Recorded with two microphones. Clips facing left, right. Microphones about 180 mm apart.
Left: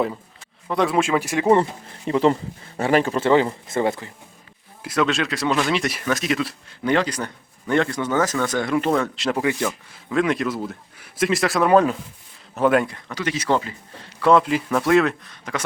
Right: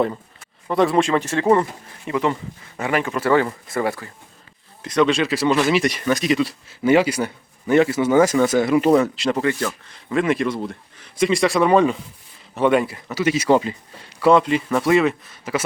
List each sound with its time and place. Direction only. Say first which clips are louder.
0.7 s speech: right 2 dB; centre (ahead or behind)
2.0 s speech: left 3 dB; 35° left (ahead or behind)
4.8 s speech: right 4 dB; 5° left (ahead or behind)
10.1 s speech: right 1 dB; centre (ahead or behind)